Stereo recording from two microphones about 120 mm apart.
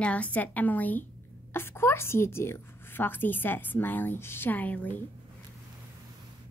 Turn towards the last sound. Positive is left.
turn(degrees=15)  # may be behind; listen again after turning